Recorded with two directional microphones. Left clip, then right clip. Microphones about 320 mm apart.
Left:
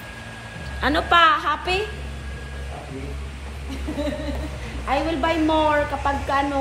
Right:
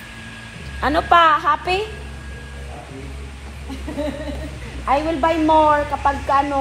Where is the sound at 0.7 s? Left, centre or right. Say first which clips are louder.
Right 3 dB; centre.